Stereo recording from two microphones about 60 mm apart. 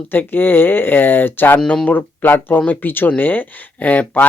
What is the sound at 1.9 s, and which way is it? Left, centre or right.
Speech, left.